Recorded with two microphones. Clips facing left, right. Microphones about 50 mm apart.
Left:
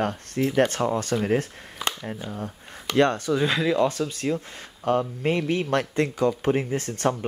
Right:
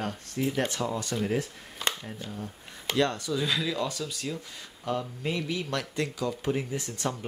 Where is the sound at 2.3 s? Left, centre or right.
Left.